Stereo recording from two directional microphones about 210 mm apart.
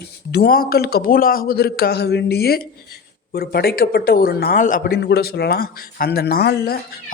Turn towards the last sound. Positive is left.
turn(degrees=50)  # may be behind; listen again after turning